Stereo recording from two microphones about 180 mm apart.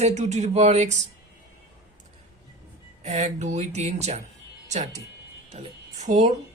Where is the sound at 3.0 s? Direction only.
40° right (ahead or behind).